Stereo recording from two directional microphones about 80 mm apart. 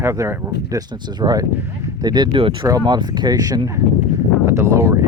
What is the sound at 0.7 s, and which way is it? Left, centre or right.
Speech, right.